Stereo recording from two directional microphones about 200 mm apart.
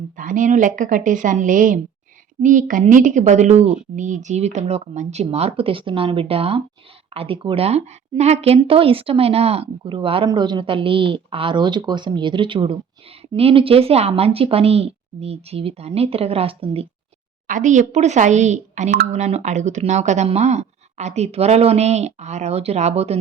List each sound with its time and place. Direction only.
0.2 s a woman's voice: 40° right (ahead or behind)